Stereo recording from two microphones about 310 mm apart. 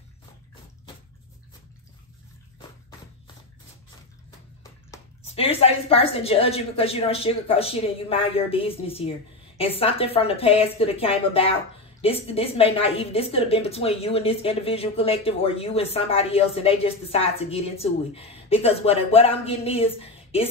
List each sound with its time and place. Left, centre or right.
4.9 s a woman's voice: centre